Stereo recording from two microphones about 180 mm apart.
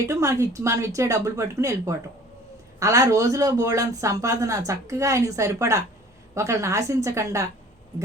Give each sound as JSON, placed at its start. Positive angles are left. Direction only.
{"t": 0.0, "sound": "speech", "side_deg": -15}